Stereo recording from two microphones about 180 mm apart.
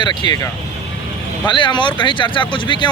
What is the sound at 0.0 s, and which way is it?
Speech, 25° left (ahead or behind).